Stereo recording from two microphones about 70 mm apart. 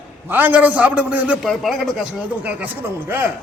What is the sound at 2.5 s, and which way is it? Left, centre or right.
Speech, right.